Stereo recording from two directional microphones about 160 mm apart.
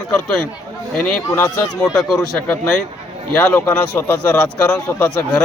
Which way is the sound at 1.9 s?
Centre (ahead or behind).